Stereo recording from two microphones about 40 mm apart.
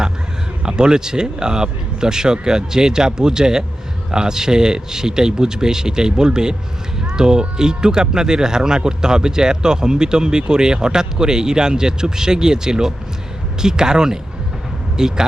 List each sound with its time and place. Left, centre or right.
0.6 s speech: centre